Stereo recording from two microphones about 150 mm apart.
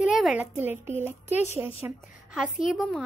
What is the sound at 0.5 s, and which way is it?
A woman's voice, 15° right (ahead or behind).